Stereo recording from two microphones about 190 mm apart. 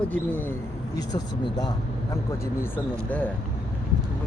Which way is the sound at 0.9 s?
20° left (ahead or behind).